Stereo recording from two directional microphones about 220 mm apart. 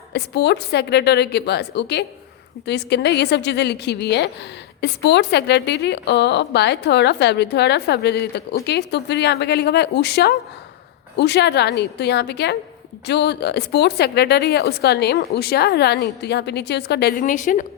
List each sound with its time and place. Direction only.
0.1 s a woman's voice: 50° left (ahead or behind)